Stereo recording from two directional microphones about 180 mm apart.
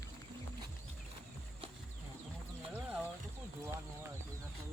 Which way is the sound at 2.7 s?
10° right (ahead or behind).